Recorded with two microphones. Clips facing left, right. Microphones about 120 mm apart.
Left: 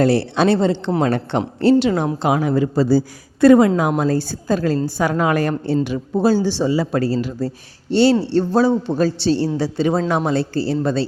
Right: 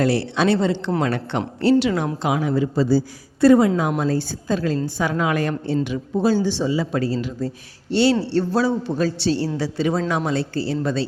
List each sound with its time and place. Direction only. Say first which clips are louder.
0.0 s speech: left 3 dB; 30° left (ahead or behind)
2.2 s speech: left 3 dB; 45° left (ahead or behind)
3.4 s a woman's voice: left 3 dB; 70° left (ahead or behind)
3.8 s a woman's voice: left 3 dB; 50° left (ahead or behind); by 11.0 s 30° left (ahead or behind)